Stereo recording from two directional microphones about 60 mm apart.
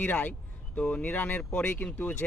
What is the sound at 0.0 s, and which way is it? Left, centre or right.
Speech, left.